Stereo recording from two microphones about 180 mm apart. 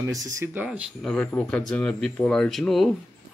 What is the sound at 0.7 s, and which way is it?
Speech, centre (ahead or behind).